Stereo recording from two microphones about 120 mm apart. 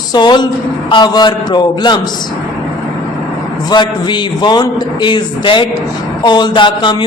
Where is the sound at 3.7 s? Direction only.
40° left (ahead or behind).